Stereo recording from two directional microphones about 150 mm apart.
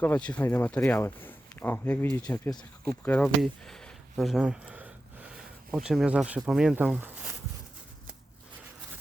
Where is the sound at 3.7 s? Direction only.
Centre (ahead or behind).